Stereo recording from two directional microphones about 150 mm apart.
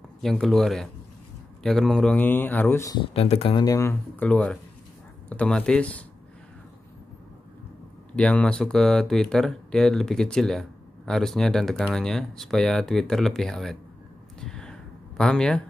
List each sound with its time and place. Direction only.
0.2 s speech: centre (ahead or behind); by 3.0 s 20° left (ahead or behind)
3.1 s speech: 40° left (ahead or behind)
3.6 s speech: 20° left (ahead or behind)
4.2 s speech: 10° left (ahead or behind)
8.2 s speech: 10° left (ahead or behind)
14.4 s a sound: 5° left (ahead or behind)